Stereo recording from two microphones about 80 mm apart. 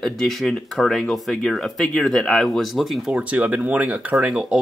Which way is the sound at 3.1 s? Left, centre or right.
Centre.